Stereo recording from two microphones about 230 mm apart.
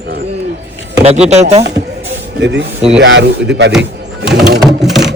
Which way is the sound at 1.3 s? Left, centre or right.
Right.